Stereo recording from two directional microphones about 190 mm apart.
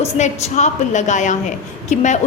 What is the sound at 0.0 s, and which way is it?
A woman's voice, 35° left (ahead or behind).